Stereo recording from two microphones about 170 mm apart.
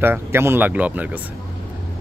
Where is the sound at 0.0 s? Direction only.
15° right (ahead or behind).